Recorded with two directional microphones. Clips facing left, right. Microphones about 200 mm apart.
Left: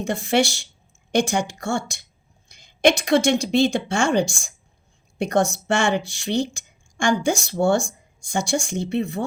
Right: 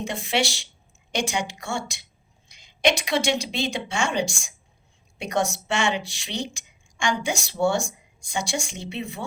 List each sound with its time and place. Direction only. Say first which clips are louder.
0.0 s speech: left 5 dB; 50° left (ahead or behind)
2.5 s a sound: left 5 dB; 50° left (ahead or behind)
3.2 s a woman's voice: left 7 dB; 50° left (ahead or behind)